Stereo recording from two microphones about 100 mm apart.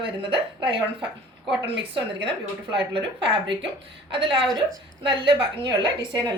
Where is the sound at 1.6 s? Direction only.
65° right (ahead or behind).